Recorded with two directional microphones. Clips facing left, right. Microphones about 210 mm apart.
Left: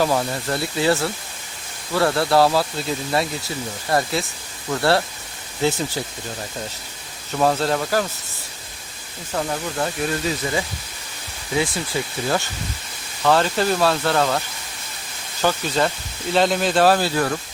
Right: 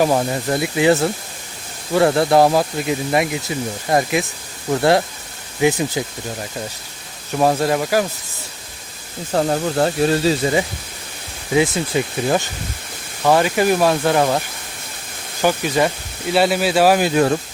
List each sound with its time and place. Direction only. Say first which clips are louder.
0.0 s speech: right 4 dB; 20° right (ahead or behind)
7.3 s speech: right 3 dB; 15° right (ahead or behind)
9.3 s speech: right 7 dB; 40° right (ahead or behind); by 17.3 s 20° right (ahead or behind)